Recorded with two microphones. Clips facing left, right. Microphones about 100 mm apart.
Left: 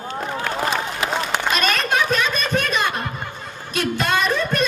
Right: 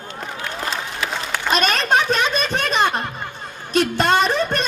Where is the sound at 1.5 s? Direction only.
30° right (ahead or behind).